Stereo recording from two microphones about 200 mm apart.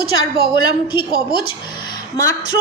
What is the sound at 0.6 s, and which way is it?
Speech, 25° left (ahead or behind).